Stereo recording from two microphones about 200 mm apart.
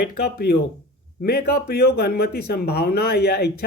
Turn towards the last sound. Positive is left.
turn(degrees=55)  # may be behind; listen again after turning